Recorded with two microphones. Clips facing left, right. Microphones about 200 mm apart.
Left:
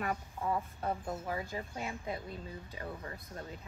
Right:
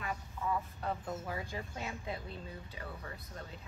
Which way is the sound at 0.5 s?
30° left (ahead or behind).